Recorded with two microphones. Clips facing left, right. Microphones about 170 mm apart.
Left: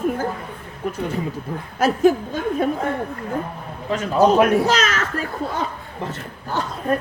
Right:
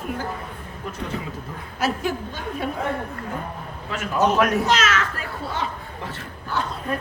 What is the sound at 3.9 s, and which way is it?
Speech, 35° left (ahead or behind).